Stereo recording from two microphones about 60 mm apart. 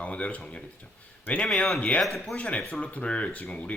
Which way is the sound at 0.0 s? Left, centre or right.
Left.